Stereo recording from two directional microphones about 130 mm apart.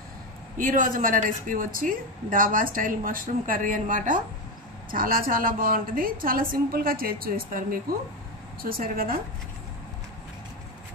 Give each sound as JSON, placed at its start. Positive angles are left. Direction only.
{"t": 0.6, "sound": "a woman's voice", "side_deg": -90}
{"t": 8.8, "sound": "a woman's voice", "side_deg": -90}